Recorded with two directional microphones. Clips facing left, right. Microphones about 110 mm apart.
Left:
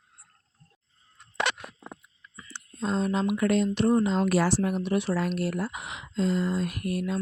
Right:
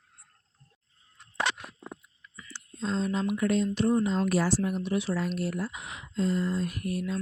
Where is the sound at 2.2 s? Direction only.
30° left (ahead or behind).